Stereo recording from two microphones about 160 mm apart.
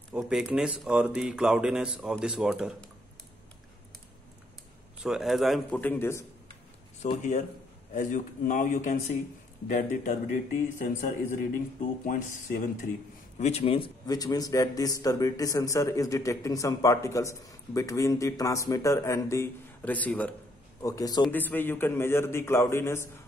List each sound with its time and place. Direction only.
0.1 s speech: 5° right (ahead or behind)
5.0 s speech: centre (ahead or behind); by 6.2 s 15° left (ahead or behind)
7.0 s speech: 50° left (ahead or behind)
13.4 s a man's voice: 40° left (ahead or behind); by 20.3 s 10° left (ahead or behind)
20.8 s a man's voice: 20° left (ahead or behind)
21.3 s a man's voice: 10° left (ahead or behind)